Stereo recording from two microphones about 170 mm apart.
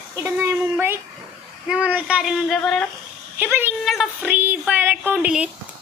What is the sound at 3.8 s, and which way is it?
A woman's voice, centre (ahead or behind).